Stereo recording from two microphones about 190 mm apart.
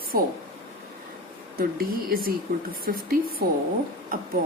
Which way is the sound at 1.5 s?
50° right (ahead or behind).